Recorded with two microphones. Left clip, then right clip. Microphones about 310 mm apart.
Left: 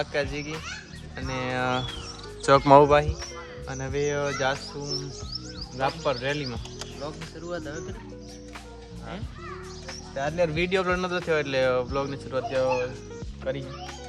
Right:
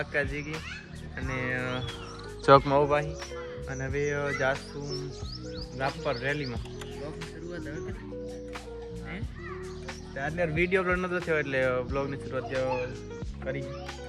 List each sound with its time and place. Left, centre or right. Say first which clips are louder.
0.0 s speech: left 2 dB; centre
2.6 s speech: left 9 dB; left
3.7 s speech: left 3 dB; centre
10.2 s speech: left 3 dB; centre